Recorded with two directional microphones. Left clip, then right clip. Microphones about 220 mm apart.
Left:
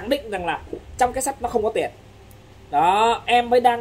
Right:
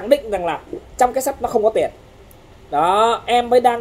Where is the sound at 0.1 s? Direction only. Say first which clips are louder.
Right 7 dB; 10° left (ahead or behind).